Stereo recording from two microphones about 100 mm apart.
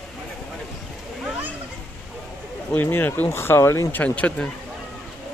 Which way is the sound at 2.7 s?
20° left (ahead or behind).